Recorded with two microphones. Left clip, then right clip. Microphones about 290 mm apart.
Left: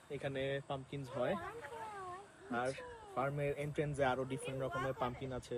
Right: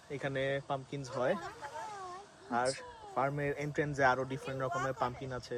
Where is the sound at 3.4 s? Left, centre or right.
Right.